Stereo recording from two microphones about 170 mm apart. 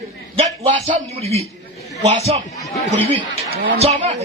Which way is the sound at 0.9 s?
40° right (ahead or behind).